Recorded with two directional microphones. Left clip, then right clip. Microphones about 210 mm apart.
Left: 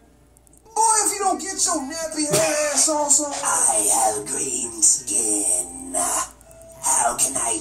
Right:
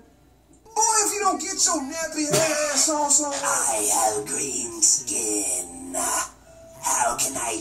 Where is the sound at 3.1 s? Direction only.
10° left (ahead or behind).